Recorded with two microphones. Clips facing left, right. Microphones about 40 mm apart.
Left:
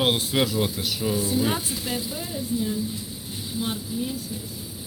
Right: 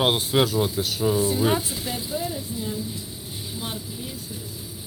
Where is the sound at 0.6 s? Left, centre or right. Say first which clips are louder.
Right 2 dB; left.